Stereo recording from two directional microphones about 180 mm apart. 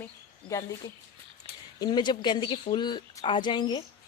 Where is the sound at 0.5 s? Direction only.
20° left (ahead or behind).